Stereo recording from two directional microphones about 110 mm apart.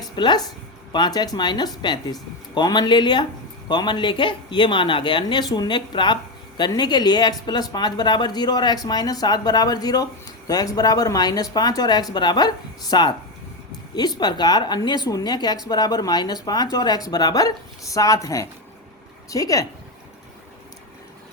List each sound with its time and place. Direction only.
0.2 s speech: 40° left (ahead or behind)